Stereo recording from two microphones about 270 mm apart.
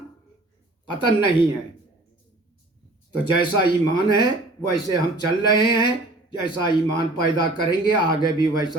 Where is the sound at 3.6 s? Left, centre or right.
Centre.